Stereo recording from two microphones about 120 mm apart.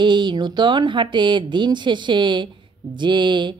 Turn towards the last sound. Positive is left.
turn(degrees=-40)  # may be behind; listen again after turning